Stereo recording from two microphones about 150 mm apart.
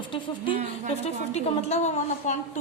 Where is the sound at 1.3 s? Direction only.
45° left (ahead or behind).